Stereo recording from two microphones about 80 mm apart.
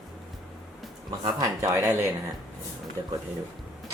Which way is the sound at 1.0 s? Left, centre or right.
Right.